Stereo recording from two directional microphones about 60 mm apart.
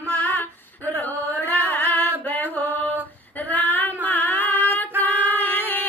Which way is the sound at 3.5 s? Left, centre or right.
Left.